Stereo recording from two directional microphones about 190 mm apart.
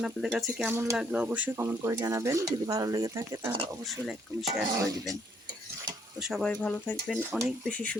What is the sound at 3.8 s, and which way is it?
Speech, centre (ahead or behind).